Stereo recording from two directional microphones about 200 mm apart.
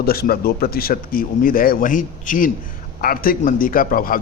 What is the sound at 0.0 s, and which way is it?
Speech, 50° left (ahead or behind).